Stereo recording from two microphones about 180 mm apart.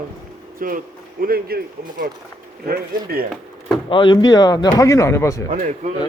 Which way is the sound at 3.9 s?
25° left (ahead or behind).